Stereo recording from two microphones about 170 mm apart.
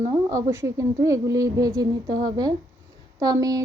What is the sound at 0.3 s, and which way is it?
Speech, 15° right (ahead or behind).